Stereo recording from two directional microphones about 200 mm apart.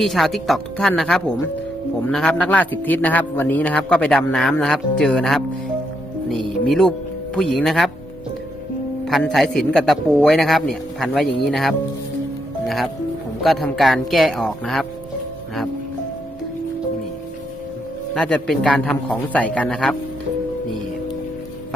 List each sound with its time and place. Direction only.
0.0 s a man's voice: centre (ahead or behind)
6.7 s a man's voice: centre (ahead or behind)
9.0 s a man's voice: centre (ahead or behind)
18.1 s a man's voice: 5° left (ahead or behind)